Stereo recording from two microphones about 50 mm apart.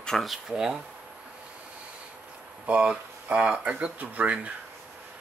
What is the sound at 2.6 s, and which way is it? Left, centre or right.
Speech, right.